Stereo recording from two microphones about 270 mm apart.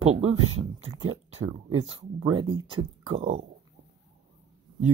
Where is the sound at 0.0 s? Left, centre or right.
Right.